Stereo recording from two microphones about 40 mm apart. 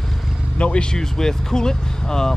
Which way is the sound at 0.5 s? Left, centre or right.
Left.